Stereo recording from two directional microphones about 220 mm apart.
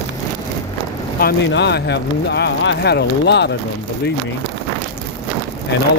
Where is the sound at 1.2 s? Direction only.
50° left (ahead or behind).